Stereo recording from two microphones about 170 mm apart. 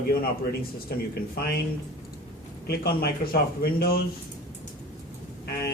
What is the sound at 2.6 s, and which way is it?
Speech, 65° left (ahead or behind).